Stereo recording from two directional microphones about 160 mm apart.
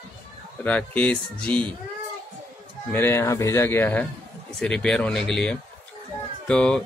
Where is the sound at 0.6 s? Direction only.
5° left (ahead or behind).